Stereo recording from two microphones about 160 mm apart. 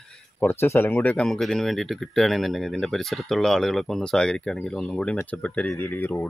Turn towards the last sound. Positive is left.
turn(degrees=10)  # may be behind; listen again after turning